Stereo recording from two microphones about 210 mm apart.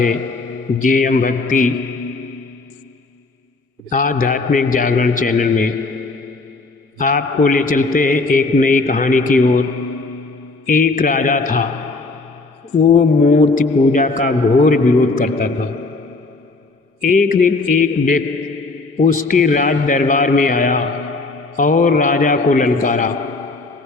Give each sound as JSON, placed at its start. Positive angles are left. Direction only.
{"t": 0.8, "sound": "a man's voice", "side_deg": 40}
{"t": 3.8, "sound": "a man's voice", "side_deg": 40}
{"t": 7.0, "sound": "a man's voice", "side_deg": 40}
{"t": 10.7, "sound": "a man's voice", "side_deg": 40}
{"t": 12.9, "sound": "a man's voice", "side_deg": 40}
{"t": 17.0, "sound": "a man's voice", "side_deg": 40}